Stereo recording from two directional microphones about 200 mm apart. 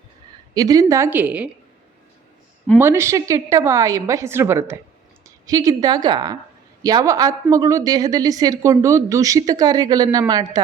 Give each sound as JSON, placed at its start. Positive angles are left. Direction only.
{"t": 0.5, "sound": "speech", "side_deg": -20}
{"t": 2.7, "sound": "a woman's voice", "side_deg": -10}